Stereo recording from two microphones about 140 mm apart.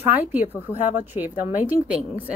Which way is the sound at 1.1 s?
10° right (ahead or behind).